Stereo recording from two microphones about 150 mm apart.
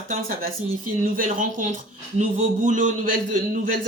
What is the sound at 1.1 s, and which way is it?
A man's voice, 60° right (ahead or behind).